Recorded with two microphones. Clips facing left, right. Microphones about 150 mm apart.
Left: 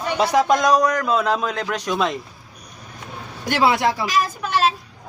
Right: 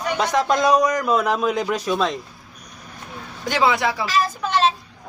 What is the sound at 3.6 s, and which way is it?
Speech, 15° left (ahead or behind).